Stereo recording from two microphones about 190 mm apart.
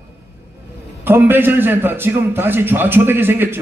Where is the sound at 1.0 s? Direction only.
10° right (ahead or behind).